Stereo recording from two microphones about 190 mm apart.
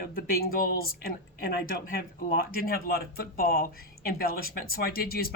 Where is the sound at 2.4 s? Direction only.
55° left (ahead or behind).